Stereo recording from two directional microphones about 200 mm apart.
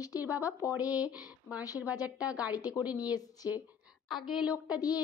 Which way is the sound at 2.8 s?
5° right (ahead or behind).